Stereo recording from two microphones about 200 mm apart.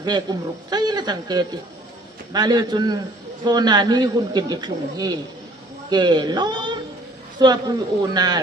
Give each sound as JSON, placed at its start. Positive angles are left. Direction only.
{"t": 0.0, "sound": "a man's voice", "side_deg": -20}